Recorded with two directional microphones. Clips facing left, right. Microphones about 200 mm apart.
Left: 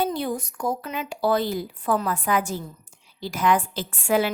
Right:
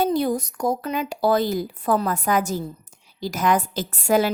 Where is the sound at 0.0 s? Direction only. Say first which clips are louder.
Right 5 dB; 40° right (ahead or behind).